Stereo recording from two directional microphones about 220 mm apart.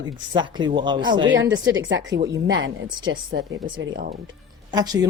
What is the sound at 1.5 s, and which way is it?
A woman's voice, 60° right (ahead or behind).